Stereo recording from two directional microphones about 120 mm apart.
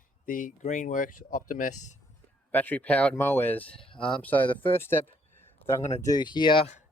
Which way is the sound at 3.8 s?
45° left (ahead or behind).